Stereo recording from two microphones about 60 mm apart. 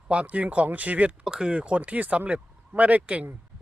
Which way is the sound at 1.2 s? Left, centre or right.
Centre.